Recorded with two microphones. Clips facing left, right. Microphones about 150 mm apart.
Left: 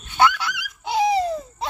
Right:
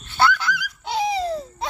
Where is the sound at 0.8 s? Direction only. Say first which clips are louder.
Left 4 dB; 10° left (ahead or behind).